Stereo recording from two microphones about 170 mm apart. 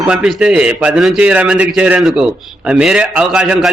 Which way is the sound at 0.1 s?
5° right (ahead or behind).